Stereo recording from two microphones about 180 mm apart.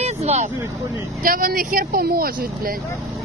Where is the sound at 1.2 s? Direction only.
50° right (ahead or behind).